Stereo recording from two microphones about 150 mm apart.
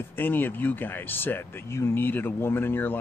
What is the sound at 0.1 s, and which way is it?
Speech, 15° left (ahead or behind).